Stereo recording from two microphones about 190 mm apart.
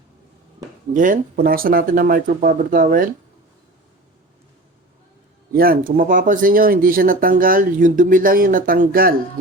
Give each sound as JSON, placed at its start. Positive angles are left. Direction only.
{"t": 0.9, "sound": "speech", "side_deg": -45}
{"t": 5.5, "sound": "speech", "side_deg": -50}